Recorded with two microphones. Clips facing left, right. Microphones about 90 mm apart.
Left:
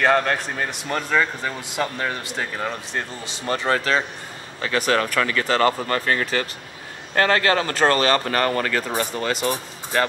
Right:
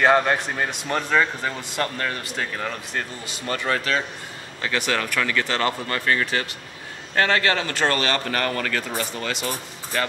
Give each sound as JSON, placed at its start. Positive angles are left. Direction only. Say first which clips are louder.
{"t": 0.0, "sound": "a man's voice", "louder": "right 1 dB", "side_deg": -5}
{"t": 2.0, "sound": "speech", "louder": "left 1 dB", "side_deg": 15}
{"t": 7.2, "sound": "speech", "louder": "left 2 dB", "side_deg": 35}